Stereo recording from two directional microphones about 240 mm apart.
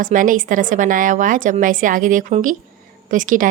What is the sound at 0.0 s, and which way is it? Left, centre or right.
A woman's voice, right.